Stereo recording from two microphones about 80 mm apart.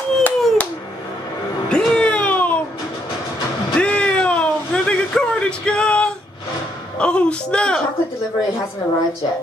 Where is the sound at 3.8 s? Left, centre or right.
Centre.